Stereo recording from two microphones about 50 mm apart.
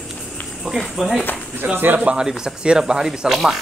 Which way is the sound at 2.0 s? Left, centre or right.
Centre.